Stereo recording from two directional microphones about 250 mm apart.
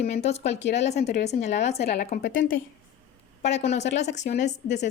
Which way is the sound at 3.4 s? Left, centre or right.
Left.